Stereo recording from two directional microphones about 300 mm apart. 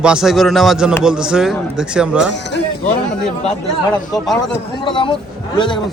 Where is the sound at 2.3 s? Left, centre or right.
Left.